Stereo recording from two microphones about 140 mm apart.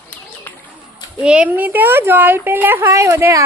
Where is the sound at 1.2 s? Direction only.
10° right (ahead or behind).